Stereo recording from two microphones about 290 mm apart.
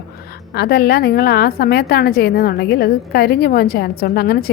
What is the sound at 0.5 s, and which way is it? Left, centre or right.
A woman's voice, left.